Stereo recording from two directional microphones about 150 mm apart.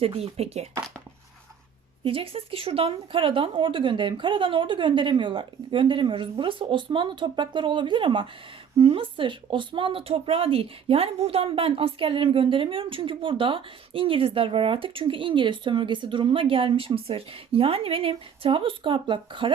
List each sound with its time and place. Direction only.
0.0 s speech: 40° right (ahead or behind)
2.0 s a woman's voice: 40° right (ahead or behind)